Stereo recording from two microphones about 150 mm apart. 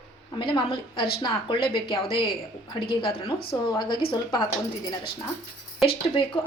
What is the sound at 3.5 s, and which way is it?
Speech, 30° left (ahead or behind).